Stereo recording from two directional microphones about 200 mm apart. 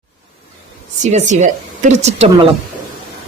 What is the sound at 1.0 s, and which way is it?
Speech, 35° right (ahead or behind).